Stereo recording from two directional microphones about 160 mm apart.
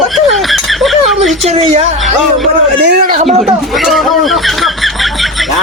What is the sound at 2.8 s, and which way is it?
Speech, 65° right (ahead or behind).